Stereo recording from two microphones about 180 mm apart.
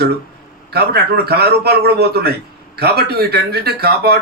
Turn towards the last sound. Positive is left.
turn(degrees=-60)  # may be behind; listen again after turning